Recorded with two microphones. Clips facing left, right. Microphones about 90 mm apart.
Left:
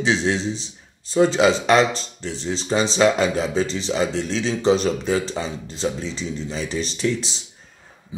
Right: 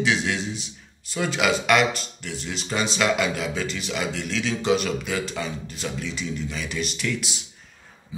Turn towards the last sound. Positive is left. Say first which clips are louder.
# left 5 dB
turn(degrees=30)  # may be behind; listen again after turning